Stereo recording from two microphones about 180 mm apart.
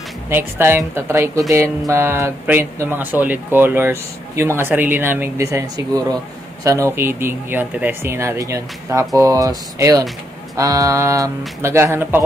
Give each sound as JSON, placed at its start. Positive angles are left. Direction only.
{"t": 0.3, "sound": "speech", "side_deg": -10}